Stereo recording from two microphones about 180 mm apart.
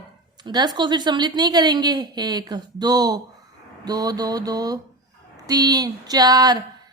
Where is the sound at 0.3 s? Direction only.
25° right (ahead or behind).